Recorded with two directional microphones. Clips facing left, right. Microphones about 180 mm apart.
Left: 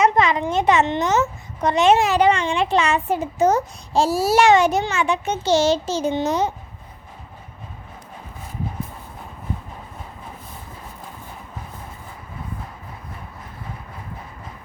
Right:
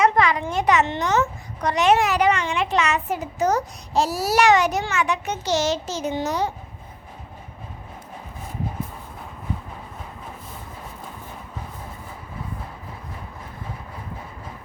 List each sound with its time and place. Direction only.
0.0 s a child's voice: 20° left (ahead or behind)